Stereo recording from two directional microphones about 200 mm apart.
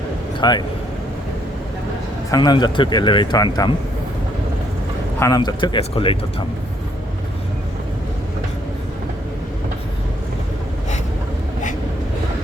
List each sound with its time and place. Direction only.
0.3 s speech: 20° left (ahead or behind)
2.3 s a man's voice: 20° left (ahead or behind)
5.2 s a man's voice: 20° left (ahead or behind)